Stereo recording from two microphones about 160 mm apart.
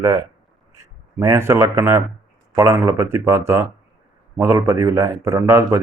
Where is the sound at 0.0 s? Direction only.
15° right (ahead or behind).